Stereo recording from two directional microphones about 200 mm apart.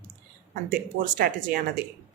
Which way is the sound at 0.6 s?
45° right (ahead or behind).